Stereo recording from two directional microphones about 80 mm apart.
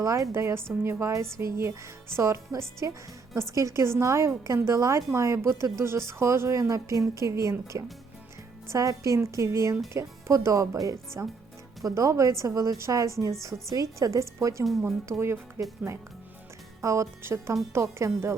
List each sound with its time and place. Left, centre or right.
0.0 s a woman's voice: right
14.6 s speech: centre
14.8 s a woman's voice: right
16.8 s a woman's voice: right